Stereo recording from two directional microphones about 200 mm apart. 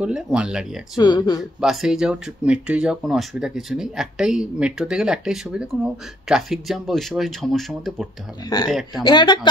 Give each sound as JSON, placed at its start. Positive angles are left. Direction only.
{"t": 0.0, "sound": "speech", "side_deg": -5}
{"t": 0.9, "sound": "speech", "side_deg": 20}
{"t": 1.6, "sound": "speech", "side_deg": 0}
{"t": 9.0, "sound": "speech", "side_deg": 20}